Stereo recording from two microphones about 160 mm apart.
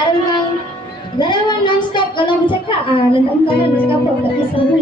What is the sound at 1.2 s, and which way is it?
A woman's voice, 30° left (ahead or behind).